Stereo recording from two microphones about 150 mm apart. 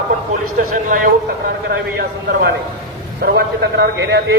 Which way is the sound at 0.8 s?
65° right (ahead or behind).